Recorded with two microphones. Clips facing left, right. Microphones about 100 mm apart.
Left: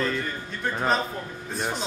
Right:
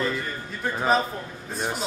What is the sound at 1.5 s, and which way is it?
Speech, centre (ahead or behind).